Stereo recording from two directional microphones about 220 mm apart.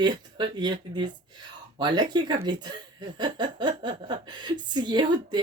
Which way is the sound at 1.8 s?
20° right (ahead or behind).